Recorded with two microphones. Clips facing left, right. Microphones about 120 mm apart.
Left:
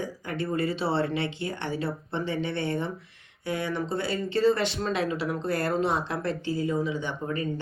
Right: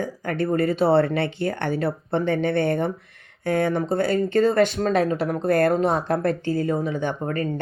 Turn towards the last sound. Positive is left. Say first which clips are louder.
# right 5 dB
turn(degrees=-55)  # may be behind; listen again after turning